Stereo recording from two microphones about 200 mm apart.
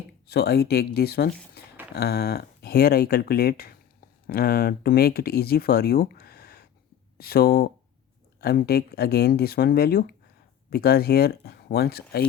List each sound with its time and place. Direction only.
0.3 s speech: 55° left (ahead or behind)